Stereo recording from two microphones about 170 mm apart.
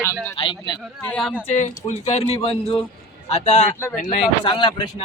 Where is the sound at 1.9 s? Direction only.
40° left (ahead or behind).